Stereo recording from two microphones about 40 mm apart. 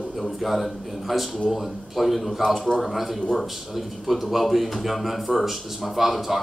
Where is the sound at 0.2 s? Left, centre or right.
Centre.